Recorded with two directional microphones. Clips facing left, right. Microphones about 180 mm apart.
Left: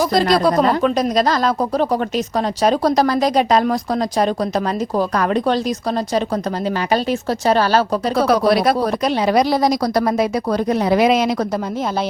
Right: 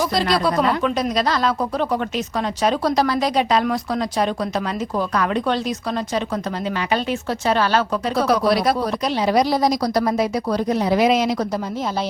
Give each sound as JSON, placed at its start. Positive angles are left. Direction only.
{"t": 0.0, "sound": "speech", "side_deg": 45}
{"t": 6.9, "sound": "speech", "side_deg": 40}
{"t": 8.3, "sound": "speech", "side_deg": 55}